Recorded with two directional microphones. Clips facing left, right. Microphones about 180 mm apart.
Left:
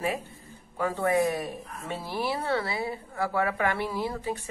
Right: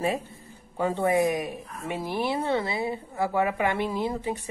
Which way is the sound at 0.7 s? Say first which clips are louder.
Right 2 dB; 20° right (ahead or behind).